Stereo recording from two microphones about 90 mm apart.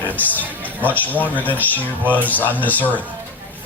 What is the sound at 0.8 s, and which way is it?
A man's voice, 20° left (ahead or behind).